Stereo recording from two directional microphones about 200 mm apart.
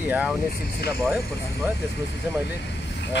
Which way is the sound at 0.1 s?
5° right (ahead or behind).